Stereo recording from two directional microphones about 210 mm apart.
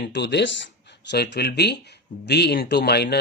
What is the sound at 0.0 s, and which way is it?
Speech, 55° left (ahead or behind).